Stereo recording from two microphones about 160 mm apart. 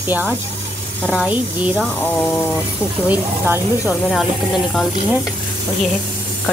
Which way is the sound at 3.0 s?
15° right (ahead or behind).